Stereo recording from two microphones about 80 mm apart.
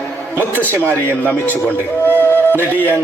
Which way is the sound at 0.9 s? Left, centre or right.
Left.